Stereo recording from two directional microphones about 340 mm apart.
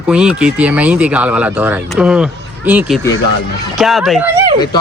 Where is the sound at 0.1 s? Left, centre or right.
Centre.